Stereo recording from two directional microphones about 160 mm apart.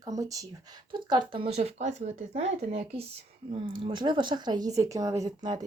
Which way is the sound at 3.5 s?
35° right (ahead or behind).